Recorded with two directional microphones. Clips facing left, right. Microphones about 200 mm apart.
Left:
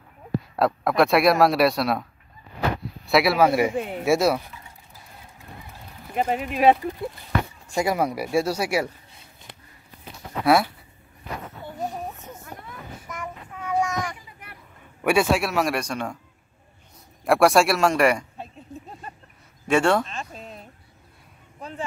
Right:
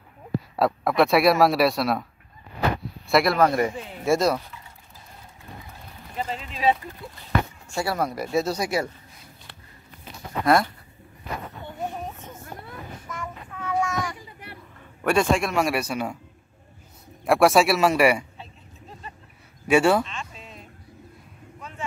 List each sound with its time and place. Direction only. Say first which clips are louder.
0.6 s speech: even; centre (ahead or behind)
3.1 s speech: left 1 dB; 5° left (ahead or behind)
6.1 s speech: left 8 dB; 60° left (ahead or behind)
7.7 s speech: left 3 dB; 15° left (ahead or behind)
10.4 s speech: left 1 dB; 5° left (ahead or behind)
13.1 s child singing: left 1 dB; 15° left (ahead or behind)
15.0 s speech: left 1 dB; 5° left (ahead or behind)
17.2 s speech: even; centre (ahead or behind)
19.7 s speech: right 1 dB; 5° right (ahead or behind)
20.1 s a sound: left 2 dB; 40° left (ahead or behind)
21.5 s a sound: left 6 dB; 35° left (ahead or behind)